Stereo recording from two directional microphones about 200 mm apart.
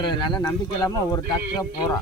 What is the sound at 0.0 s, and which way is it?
Speech, 25° left (ahead or behind).